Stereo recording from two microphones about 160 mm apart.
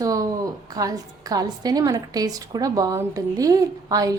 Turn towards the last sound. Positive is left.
turn(degrees=-20)  # may be behind; listen again after turning